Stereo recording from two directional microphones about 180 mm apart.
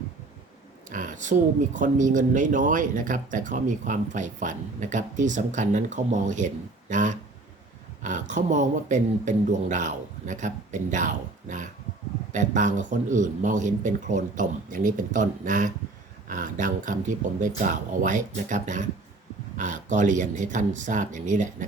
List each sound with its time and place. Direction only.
0.9 s speech: 45° right (ahead or behind)